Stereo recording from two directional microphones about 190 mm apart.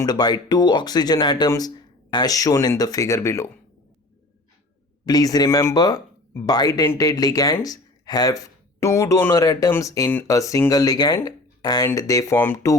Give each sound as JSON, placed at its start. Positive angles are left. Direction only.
{"t": 0.0, "sound": "speech", "side_deg": 20}
{"t": 5.0, "sound": "speech", "side_deg": 20}